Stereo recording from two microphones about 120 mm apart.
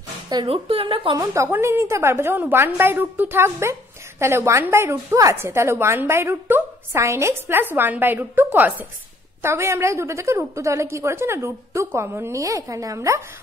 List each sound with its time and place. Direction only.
0.5 s a woman's voice: 50° right (ahead or behind)
1.1 s a woman's voice: 25° right (ahead or behind)